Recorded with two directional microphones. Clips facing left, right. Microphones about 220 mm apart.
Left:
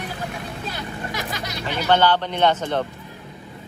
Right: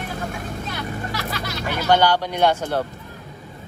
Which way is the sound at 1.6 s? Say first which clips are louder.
Even; 10° right (ahead or behind).